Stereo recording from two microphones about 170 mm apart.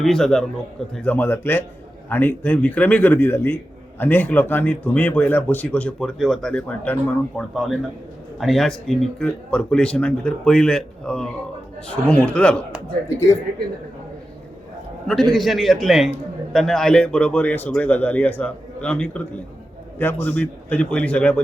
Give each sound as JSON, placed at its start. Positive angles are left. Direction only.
{"t": 0.0, "sound": "a man's voice", "side_deg": 0}
{"t": 15.0, "sound": "a man's voice", "side_deg": 0}